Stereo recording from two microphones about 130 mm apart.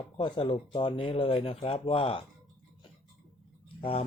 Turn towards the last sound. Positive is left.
turn(degrees=45)  # may be behind; listen again after turning